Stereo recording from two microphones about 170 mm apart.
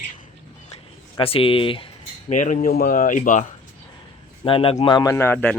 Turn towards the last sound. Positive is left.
turn(degrees=10)  # may be behind; listen again after turning